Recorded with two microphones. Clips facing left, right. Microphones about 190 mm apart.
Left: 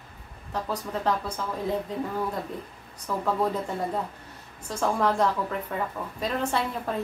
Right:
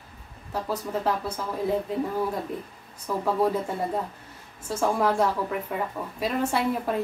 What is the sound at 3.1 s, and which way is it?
Speech, 10° right (ahead or behind).